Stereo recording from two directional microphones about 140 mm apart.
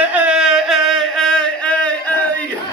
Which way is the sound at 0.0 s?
10° right (ahead or behind).